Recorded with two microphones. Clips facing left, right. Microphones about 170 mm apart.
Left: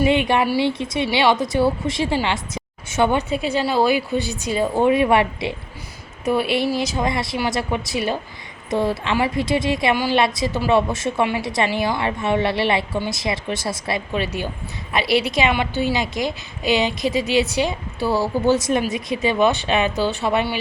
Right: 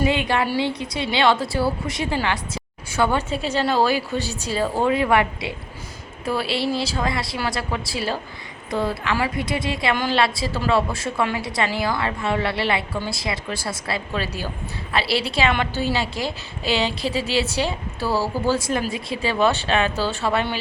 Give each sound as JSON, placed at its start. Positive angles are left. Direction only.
{"t": 0.0, "sound": "a woman's voice", "side_deg": 20}
{"t": 9.9, "sound": "a woman's voice", "side_deg": 10}